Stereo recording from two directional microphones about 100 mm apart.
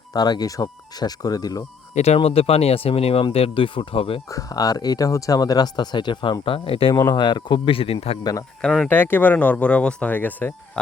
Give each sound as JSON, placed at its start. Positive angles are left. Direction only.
{"t": 0.1, "sound": "speech", "side_deg": 40}
{"t": 2.0, "sound": "speech", "side_deg": 90}
{"t": 4.3, "sound": "speech", "side_deg": 35}
{"t": 6.4, "sound": "speech", "side_deg": 65}
{"t": 6.9, "sound": "speech", "side_deg": 30}
{"t": 7.2, "sound": "speech", "side_deg": 50}
{"t": 8.2, "sound": "speech", "side_deg": 40}
{"t": 8.6, "sound": "speech", "side_deg": 5}
{"t": 8.9, "sound": "speech", "side_deg": 20}